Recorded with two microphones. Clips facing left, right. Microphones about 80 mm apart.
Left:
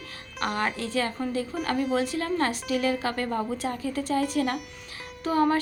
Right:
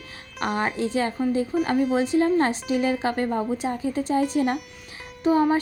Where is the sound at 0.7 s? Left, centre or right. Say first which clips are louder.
Right 4 dB; right.